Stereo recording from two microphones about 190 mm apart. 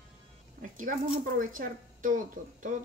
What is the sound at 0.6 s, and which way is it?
Speech, 45° right (ahead or behind).